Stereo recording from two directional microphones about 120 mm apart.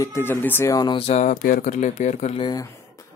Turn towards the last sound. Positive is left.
turn(degrees=30)  # may be behind; listen again after turning